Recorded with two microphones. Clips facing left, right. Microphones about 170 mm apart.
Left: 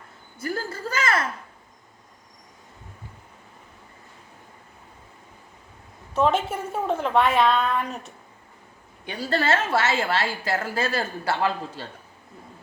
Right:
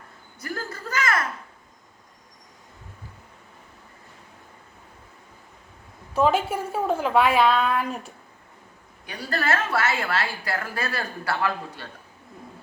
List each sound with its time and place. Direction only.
0.3 s a sound: 30° left (ahead or behind)
6.1 s a woman's voice: 5° right (ahead or behind)
9.0 s a woman's voice: 25° left (ahead or behind)